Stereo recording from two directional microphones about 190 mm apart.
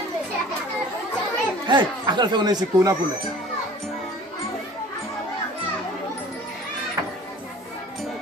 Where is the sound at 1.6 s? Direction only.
25° right (ahead or behind).